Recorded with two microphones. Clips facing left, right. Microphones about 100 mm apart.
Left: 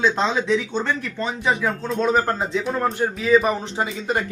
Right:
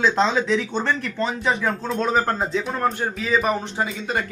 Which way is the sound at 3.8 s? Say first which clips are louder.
Left 4 dB; 20° left (ahead or behind).